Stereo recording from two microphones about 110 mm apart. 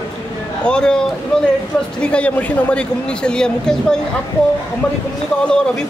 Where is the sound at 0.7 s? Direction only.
5° left (ahead or behind).